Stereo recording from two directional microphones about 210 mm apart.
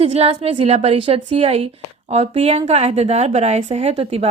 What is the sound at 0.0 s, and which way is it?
A woman's voice, 30° right (ahead or behind).